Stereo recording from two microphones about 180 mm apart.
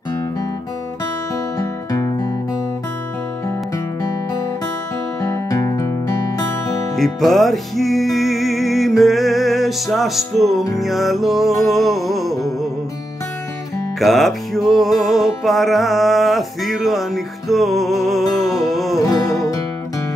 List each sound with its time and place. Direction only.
1.6 s music: 20° left (ahead or behind)
5.2 s music: 15° left (ahead or behind)
7.0 s music: centre (ahead or behind)
13.9 s music: centre (ahead or behind)
18.9 s music: 20° left (ahead or behind)